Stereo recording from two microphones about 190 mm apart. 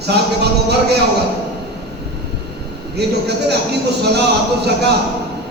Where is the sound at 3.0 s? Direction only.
60° right (ahead or behind).